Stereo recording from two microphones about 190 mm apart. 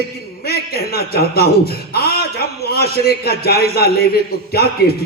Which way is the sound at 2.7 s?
55° left (ahead or behind).